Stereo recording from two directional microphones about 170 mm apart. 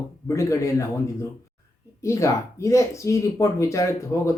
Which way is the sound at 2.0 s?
15° left (ahead or behind).